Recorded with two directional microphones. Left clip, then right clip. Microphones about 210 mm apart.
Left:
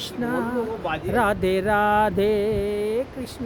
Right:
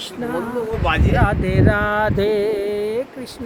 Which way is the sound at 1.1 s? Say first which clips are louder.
Right 1 dB; 50° left (ahead or behind).